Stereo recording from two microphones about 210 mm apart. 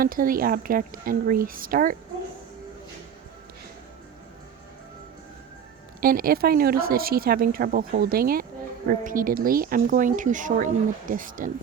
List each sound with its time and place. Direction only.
0.0 s a woman's voice: 40° right (ahead or behind)
6.0 s a woman's voice: 45° right (ahead or behind)